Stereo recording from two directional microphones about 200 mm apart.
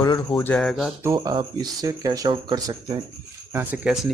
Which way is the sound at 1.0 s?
20° right (ahead or behind).